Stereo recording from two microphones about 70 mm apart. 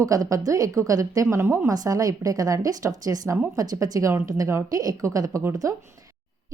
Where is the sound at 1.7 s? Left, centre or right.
Right.